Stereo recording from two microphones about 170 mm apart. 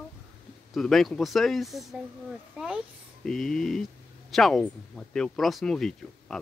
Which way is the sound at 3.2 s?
5° left (ahead or behind).